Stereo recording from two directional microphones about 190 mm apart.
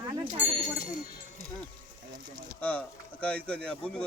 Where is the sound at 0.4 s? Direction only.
40° right (ahead or behind).